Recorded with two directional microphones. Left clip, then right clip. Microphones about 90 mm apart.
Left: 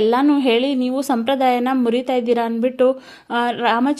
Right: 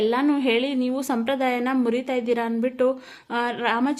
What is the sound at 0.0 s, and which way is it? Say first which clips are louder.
A woman's voice: left 6 dB; 35° left (ahead or behind).